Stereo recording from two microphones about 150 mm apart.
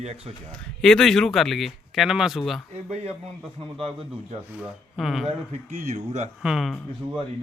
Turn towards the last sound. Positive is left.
turn(degrees=0)  # may be behind; listen again after turning